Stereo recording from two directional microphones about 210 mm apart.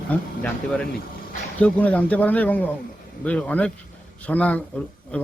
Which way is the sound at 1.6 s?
5° left (ahead or behind).